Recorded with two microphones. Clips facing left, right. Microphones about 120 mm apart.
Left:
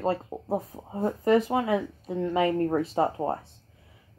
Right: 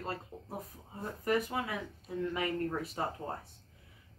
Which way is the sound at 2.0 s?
30° left (ahead or behind).